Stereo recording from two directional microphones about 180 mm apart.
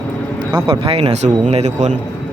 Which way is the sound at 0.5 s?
30° right (ahead or behind).